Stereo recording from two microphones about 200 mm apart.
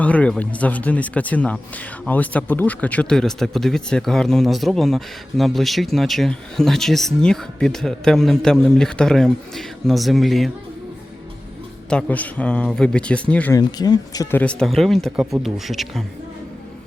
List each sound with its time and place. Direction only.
0.0 s speech: 5° left (ahead or behind)
11.9 s speech: 5° left (ahead or behind)
13.6 s speech: 20° left (ahead or behind); by 16.0 s centre (ahead or behind)